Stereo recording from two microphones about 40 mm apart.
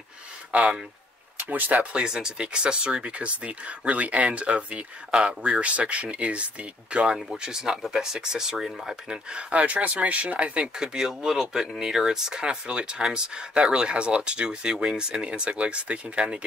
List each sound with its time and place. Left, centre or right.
0.5 s speech: right
1.5 s speech: right
2.0 s speech: centre
7.4 s speech: centre
9.5 s speech: right
10.8 s speech: centre